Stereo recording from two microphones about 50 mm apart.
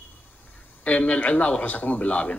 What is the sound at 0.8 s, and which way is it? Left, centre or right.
A man's voice, left.